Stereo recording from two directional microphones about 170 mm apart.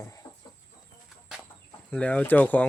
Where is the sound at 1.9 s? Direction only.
10° left (ahead or behind).